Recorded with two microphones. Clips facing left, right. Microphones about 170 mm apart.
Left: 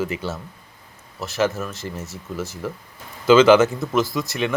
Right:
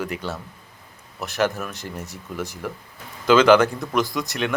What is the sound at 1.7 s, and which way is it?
Speech, 15° right (ahead or behind).